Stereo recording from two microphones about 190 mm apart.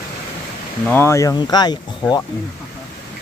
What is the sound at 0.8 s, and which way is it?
Speech, 10° left (ahead or behind).